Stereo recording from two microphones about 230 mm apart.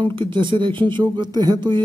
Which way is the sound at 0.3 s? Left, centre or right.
Right.